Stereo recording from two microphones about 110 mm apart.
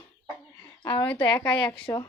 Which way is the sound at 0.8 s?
50° left (ahead or behind).